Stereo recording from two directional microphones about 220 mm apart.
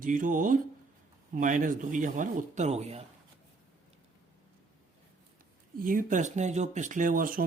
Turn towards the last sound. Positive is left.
turn(degrees=-40)  # may be behind; listen again after turning